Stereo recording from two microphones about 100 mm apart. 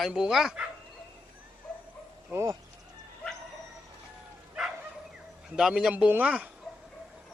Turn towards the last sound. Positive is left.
turn(degrees=-15)  # may be behind; listen again after turning